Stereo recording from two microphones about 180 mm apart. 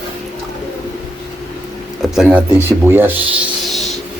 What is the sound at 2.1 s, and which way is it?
Speech, 5° right (ahead or behind).